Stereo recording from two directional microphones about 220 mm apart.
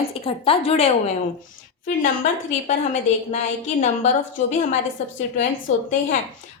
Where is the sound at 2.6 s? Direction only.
30° left (ahead or behind).